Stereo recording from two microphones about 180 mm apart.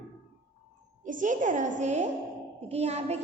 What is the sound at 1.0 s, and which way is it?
A woman's voice, 45° right (ahead or behind).